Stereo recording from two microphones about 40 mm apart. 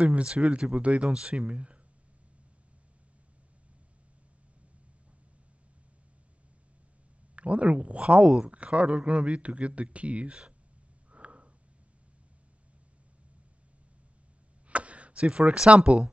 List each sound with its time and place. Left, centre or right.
0.0 s speech: right
7.3 s speech: right
11.1 s sniff: right
14.7 s speech: right